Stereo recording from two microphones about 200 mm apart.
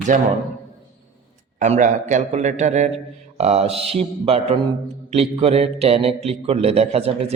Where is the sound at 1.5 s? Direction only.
35° right (ahead or behind).